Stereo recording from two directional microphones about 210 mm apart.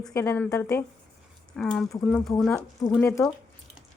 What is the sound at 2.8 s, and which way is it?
Speech, 15° left (ahead or behind).